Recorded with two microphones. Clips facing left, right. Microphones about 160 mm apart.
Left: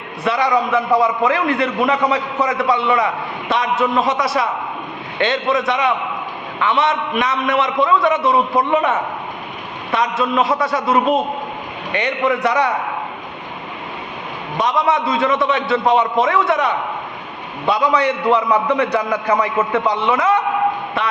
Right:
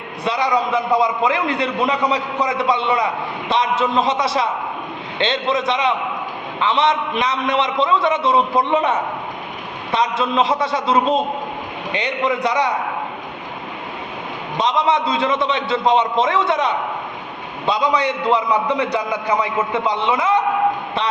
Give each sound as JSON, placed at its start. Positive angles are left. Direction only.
{"t": 0.3, "sound": "a man's voice", "side_deg": -20}
{"t": 14.8, "sound": "a man's voice", "side_deg": -20}